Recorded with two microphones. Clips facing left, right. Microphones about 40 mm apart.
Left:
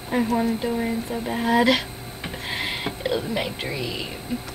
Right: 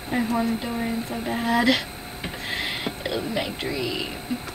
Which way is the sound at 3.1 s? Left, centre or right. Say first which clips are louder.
Left 1 dB; centre.